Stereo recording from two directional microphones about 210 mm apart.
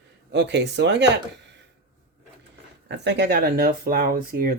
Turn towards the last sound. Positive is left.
turn(degrees=-40)  # may be behind; listen again after turning